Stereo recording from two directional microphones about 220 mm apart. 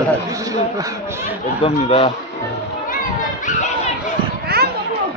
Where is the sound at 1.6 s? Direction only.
25° left (ahead or behind).